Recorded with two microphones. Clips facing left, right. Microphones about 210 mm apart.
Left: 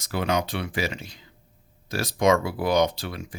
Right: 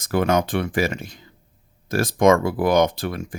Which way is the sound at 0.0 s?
50° right (ahead or behind).